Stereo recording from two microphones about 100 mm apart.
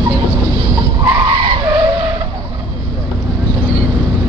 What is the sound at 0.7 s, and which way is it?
Skidding, 50° right (ahead or behind).